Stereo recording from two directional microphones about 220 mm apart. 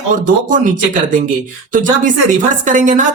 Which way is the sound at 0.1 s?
35° right (ahead or behind).